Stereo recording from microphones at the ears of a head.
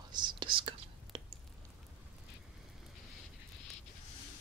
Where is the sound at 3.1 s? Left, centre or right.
Left.